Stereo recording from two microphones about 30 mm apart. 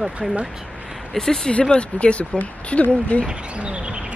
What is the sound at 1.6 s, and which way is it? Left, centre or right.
Speech, left.